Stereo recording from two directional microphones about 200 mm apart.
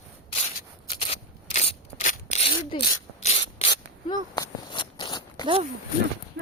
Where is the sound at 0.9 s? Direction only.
30° left (ahead or behind).